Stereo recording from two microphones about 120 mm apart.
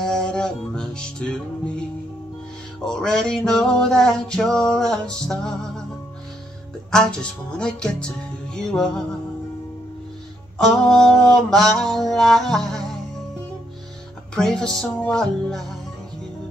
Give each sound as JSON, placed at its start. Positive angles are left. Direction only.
{"t": 0.0, "sound": "music", "side_deg": 5}
{"t": 6.9, "sound": "speech", "side_deg": 5}
{"t": 8.5, "sound": "music", "side_deg": 5}
{"t": 10.6, "sound": "music", "side_deg": 5}
{"t": 14.3, "sound": "music", "side_deg": 5}